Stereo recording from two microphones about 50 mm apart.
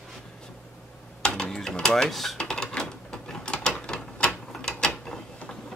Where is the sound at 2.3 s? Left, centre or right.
Centre.